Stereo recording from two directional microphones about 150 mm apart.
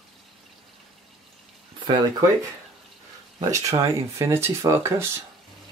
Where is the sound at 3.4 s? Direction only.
20° right (ahead or behind).